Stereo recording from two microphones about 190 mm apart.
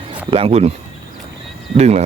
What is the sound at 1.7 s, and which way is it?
Speech, 35° right (ahead or behind).